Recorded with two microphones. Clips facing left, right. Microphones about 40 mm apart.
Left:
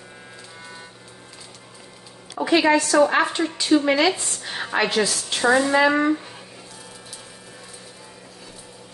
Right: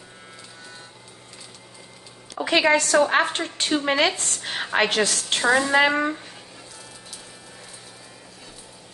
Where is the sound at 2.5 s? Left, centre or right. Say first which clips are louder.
Left 1 dB; right.